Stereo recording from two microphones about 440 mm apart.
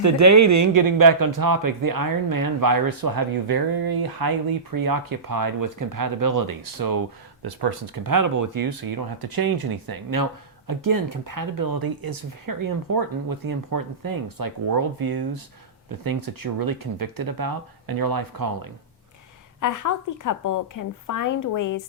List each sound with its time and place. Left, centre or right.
0.0 s speech: right
19.5 s a woman's voice: left